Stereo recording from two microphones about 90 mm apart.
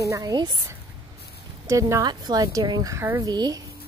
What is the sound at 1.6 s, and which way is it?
Speech, 35° right (ahead or behind).